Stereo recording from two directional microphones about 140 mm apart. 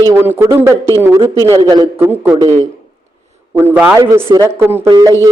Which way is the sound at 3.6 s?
15° right (ahead or behind).